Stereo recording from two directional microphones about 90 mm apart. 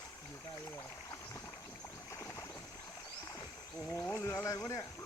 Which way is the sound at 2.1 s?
35° left (ahead or behind).